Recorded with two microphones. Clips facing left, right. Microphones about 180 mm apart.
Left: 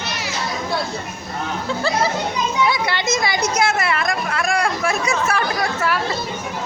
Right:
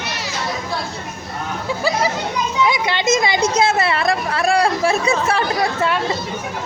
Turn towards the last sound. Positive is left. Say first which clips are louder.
# right 2 dB
turn(degrees=-30)  # may be behind; listen again after turning